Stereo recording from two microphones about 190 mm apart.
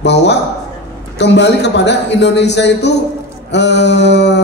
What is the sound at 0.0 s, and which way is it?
A man's voice, 65° left (ahead or behind).